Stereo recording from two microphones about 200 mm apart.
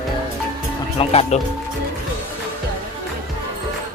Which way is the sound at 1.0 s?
30° left (ahead or behind).